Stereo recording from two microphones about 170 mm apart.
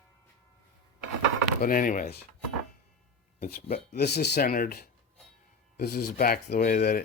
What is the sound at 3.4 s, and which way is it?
Speech, 40° left (ahead or behind).